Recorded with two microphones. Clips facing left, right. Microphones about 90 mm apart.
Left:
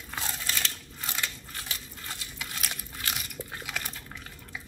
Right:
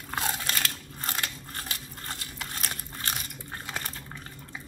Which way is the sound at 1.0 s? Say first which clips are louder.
Right 1 dB; 45° right (ahead or behind).